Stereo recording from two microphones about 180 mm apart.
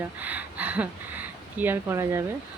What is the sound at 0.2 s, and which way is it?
Speech, 10° right (ahead or behind).